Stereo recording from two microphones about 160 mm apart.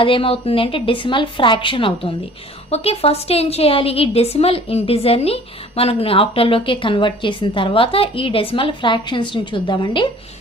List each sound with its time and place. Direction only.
0.0 s a woman's voice: 35° left (ahead or behind)